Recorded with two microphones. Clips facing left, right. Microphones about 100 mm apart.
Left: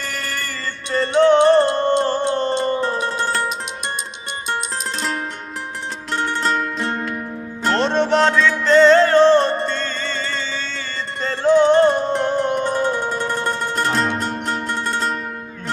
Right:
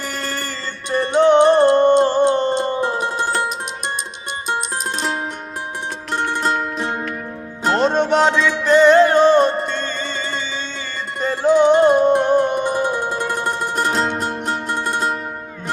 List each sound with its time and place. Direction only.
0.0 s music: 20° right (ahead or behind)